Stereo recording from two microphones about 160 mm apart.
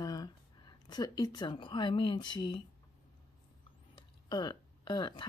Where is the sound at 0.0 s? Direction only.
25° left (ahead or behind).